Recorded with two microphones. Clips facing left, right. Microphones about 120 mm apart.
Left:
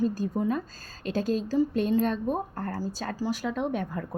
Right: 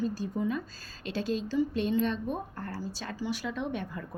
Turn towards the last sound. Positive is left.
turn(degrees=45)  # may be behind; listen again after turning